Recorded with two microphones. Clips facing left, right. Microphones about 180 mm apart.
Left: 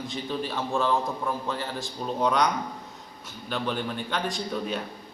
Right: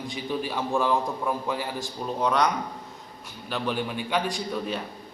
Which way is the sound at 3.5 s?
10° right (ahead or behind).